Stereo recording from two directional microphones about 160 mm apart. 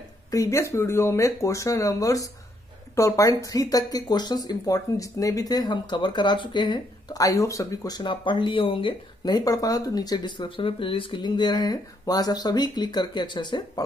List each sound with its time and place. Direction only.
0.3 s speech: 20° left (ahead or behind)